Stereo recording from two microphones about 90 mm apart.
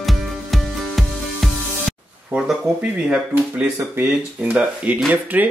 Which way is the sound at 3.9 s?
20° right (ahead or behind).